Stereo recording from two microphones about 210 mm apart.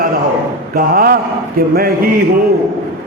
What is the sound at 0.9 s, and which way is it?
A man's voice, 45° right (ahead or behind).